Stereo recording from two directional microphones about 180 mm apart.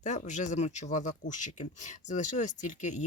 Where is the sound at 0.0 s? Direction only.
40° left (ahead or behind).